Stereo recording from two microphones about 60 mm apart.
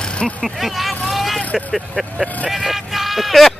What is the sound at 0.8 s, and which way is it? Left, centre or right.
Vehicle, centre.